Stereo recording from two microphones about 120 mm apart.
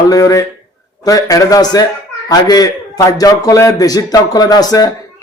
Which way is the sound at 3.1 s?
30° left (ahead or behind).